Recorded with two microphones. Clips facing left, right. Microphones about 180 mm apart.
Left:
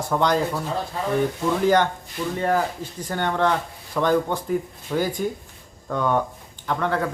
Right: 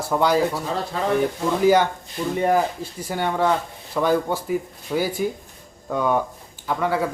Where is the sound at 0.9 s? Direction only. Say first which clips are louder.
Right 5 dB; 90° right.